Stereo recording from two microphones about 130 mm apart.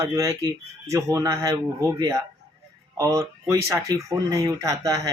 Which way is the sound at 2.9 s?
25° right (ahead or behind).